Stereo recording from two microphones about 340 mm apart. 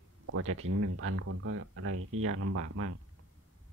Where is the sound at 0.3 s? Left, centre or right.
Right.